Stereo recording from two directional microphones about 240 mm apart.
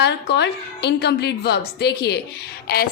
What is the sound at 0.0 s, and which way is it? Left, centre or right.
A woman's voice, left.